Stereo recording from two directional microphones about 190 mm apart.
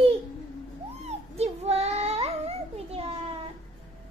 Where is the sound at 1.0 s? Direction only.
35° right (ahead or behind).